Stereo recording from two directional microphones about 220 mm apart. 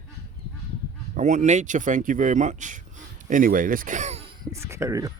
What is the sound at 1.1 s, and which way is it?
Speech, 35° right (ahead or behind).